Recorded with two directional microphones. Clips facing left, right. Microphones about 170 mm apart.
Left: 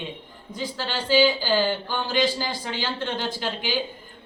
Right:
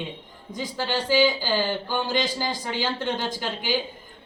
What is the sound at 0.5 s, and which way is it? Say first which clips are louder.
A woman's voice: right 2 dB; 15° right (ahead or behind).